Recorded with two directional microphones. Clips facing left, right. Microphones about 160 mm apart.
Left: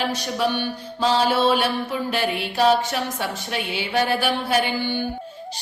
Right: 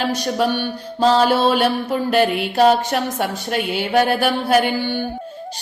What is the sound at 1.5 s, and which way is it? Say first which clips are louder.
A woman's voice: right 5 dB; 50° right (ahead or behind).